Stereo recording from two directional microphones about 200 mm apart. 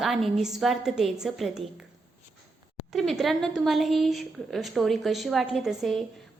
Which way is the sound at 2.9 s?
Centre (ahead or behind).